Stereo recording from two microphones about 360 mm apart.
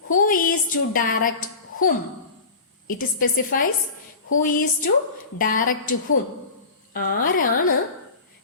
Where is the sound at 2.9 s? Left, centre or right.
Left.